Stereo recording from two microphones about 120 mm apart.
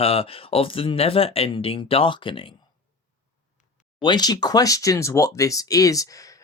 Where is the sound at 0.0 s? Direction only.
55° left (ahead or behind).